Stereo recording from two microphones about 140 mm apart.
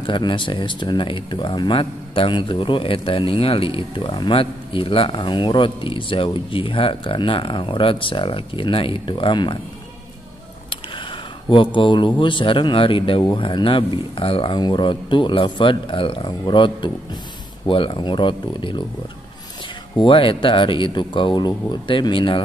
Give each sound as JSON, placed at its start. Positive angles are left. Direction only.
{"t": 0.0, "sound": "speech", "side_deg": 35}
{"t": 10.7, "sound": "speech", "side_deg": 35}
{"t": 20.0, "sound": "speech", "side_deg": 40}